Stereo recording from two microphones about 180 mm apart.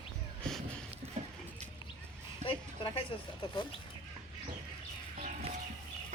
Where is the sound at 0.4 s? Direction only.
5° left (ahead or behind).